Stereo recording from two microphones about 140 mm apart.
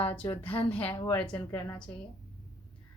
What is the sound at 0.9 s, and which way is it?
Speech, 40° left (ahead or behind).